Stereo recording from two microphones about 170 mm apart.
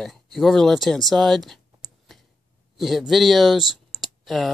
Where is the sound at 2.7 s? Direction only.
Centre (ahead or behind).